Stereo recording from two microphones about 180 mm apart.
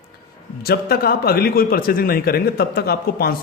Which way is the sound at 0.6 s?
60° left (ahead or behind).